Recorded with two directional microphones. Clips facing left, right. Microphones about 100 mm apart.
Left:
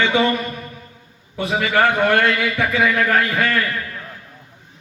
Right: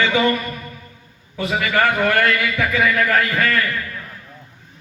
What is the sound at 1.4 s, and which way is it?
A man's voice, 25° left (ahead or behind).